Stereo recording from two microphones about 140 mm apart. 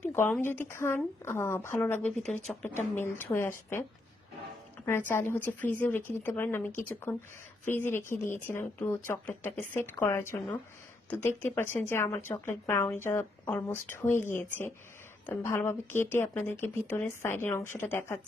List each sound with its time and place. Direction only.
0.0 s speech: 15° left (ahead or behind)
4.9 s speech: 15° left (ahead or behind)